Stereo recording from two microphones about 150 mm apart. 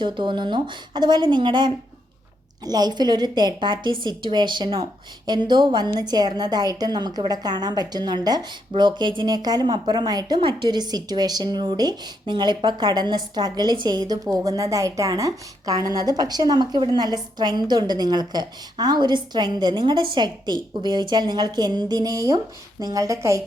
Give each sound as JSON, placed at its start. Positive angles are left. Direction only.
{"t": 0.0, "sound": "a woman's voice", "side_deg": -30}